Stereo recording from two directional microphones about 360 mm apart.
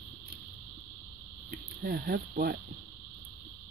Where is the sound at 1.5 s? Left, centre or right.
Right.